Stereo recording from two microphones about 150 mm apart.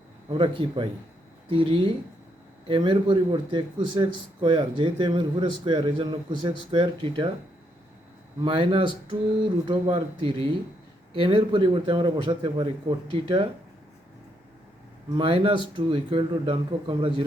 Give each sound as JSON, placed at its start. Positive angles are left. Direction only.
{"t": 0.3, "sound": "speech", "side_deg": -35}
{"t": 8.4, "sound": "speech", "side_deg": -35}
{"t": 15.2, "sound": "speech", "side_deg": -35}